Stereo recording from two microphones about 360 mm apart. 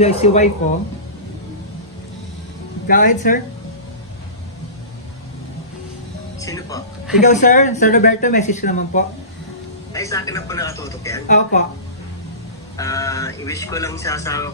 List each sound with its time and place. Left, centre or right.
0.0 s speech: centre
2.9 s speech: left
6.4 s speech: centre
7.2 s speech: centre
9.9 s speech: centre
11.2 s speech: centre
12.7 s speech: centre